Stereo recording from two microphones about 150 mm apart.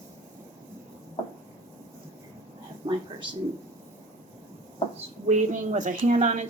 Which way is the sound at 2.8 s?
25° right (ahead or behind).